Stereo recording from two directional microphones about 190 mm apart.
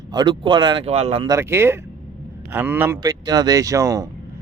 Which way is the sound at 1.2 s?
15° right (ahead or behind).